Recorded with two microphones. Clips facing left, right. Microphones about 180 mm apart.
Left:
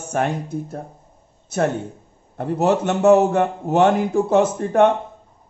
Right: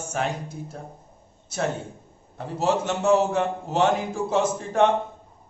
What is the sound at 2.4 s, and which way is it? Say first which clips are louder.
A man's voice: left 6 dB; 55° left (ahead or behind).